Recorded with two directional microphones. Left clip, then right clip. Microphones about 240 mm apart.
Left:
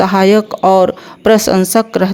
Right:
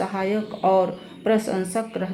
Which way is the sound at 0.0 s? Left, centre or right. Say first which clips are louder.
Left 15 dB; left.